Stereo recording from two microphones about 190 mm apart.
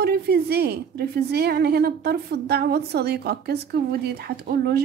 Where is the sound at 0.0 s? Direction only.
55° right (ahead or behind).